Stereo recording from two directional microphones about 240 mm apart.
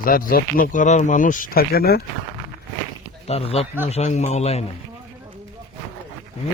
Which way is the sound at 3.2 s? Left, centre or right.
Left.